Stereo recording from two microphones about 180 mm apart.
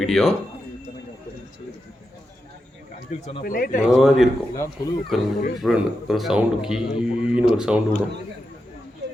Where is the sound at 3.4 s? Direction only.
50° left (ahead or behind).